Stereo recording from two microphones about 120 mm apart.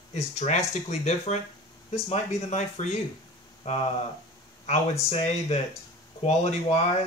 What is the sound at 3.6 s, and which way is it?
Speech, 85° left.